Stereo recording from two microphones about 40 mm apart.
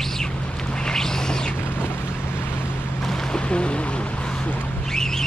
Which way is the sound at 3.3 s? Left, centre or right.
Left.